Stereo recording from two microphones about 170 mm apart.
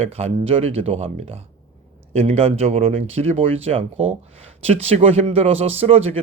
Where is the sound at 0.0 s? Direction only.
40° right (ahead or behind).